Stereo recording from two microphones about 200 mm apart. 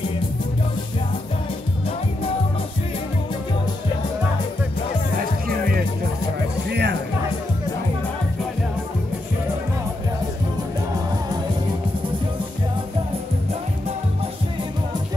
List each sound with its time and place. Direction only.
6.7 s music: 55° right (ahead or behind)